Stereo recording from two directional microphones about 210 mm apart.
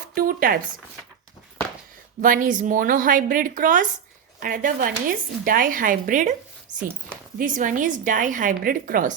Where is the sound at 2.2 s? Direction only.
40° right (ahead or behind).